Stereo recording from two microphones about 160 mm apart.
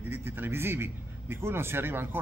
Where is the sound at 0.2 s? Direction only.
15° right (ahead or behind).